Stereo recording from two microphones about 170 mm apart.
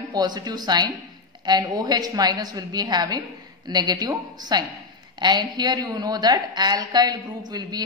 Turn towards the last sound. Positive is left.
turn(degrees=-25)  # may be behind; listen again after turning